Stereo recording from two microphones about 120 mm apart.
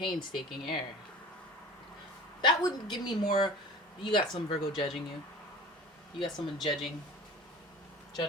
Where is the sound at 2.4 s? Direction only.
40° left (ahead or behind).